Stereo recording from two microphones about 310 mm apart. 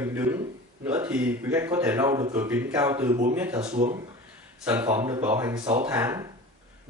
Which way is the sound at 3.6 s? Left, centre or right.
Right.